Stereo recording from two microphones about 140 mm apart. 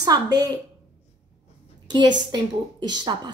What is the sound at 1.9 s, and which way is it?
A woman's voice, 30° right (ahead or behind).